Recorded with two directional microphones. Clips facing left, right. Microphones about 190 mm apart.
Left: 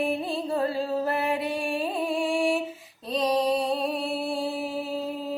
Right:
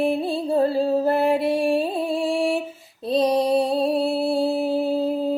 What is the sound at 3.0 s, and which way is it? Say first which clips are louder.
Mantra: right 5 dB; 30° right (ahead or behind).